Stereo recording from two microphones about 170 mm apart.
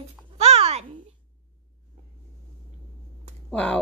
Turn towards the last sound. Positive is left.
turn(degrees=5)  # may be behind; listen again after turning